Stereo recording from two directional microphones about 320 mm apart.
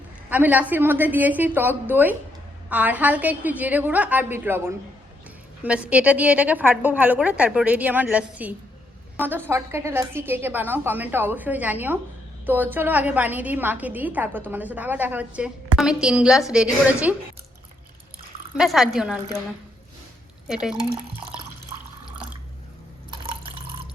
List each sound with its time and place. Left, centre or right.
0.3 s a woman's voice: centre
18.5 s a woman's voice: centre
20.5 s a woman's voice: centre
23.1 s drip: centre